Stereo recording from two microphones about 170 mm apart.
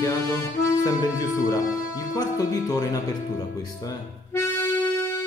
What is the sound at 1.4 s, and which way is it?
Speech, 20° left (ahead or behind).